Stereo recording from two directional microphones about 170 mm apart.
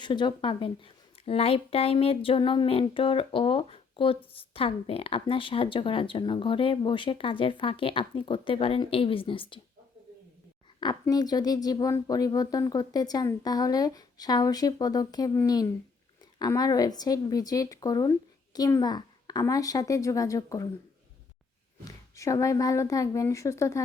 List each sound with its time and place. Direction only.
0.0 s speech: 25° left (ahead or behind)
11.0 s speech: 20° left (ahead or behind)
22.1 s speech: 20° left (ahead or behind)